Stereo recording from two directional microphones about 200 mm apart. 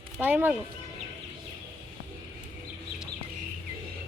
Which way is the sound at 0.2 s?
10° right (ahead or behind).